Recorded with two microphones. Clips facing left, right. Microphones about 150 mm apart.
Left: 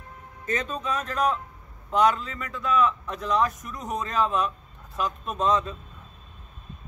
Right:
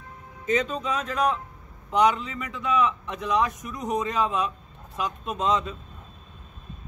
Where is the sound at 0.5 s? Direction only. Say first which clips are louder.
Right 3 dB; 15° right (ahead or behind).